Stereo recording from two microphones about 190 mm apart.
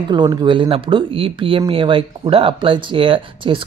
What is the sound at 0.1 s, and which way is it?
Speech, 25° right (ahead or behind).